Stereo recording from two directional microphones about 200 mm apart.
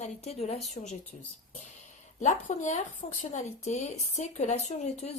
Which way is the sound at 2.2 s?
35° left (ahead or behind).